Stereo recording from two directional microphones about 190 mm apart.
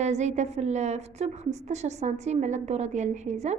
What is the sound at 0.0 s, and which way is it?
A woman's voice, 35° right (ahead or behind).